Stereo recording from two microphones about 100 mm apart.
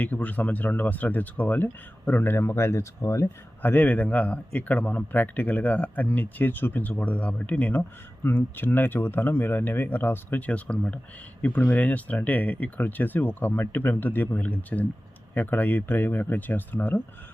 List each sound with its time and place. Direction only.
0.0 s a man's voice: 15° left (ahead or behind)
3.6 s a man's voice: 15° left (ahead or behind)